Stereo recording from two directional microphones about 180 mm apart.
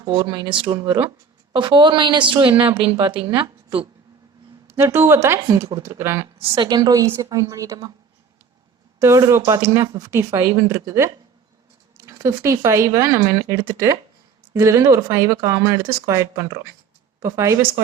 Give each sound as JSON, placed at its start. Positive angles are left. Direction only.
{"t": 0.0, "sound": "a woman's voice", "side_deg": -20}
{"t": 4.8, "sound": "speech", "side_deg": -15}
{"t": 6.4, "sound": "a woman's voice", "side_deg": -25}
{"t": 9.0, "sound": "speech", "side_deg": -15}